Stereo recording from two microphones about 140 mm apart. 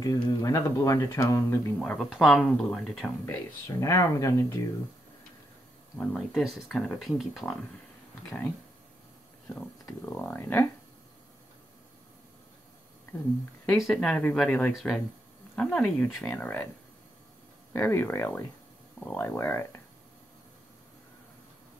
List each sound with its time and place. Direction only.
0.0 s speech: 25° left (ahead or behind)
1.8 s speech: 5° left (ahead or behind)
3.6 s speech: 25° left (ahead or behind)
5.9 s speech: centre (ahead or behind)
9.8 s speech: 15° left (ahead or behind)
13.8 s speech: 5° left (ahead or behind)
17.7 s speech: 15° left (ahead or behind)